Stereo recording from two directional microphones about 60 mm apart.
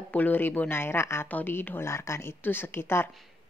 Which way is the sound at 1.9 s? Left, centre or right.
Left.